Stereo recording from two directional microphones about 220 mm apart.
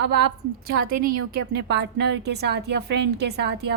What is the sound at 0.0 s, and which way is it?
A woman's voice, 50° right (ahead or behind).